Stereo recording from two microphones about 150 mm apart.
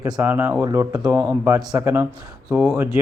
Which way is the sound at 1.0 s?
10° right (ahead or behind).